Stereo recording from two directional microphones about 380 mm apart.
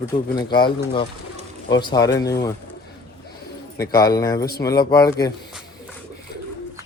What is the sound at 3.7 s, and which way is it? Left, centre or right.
Speech, centre.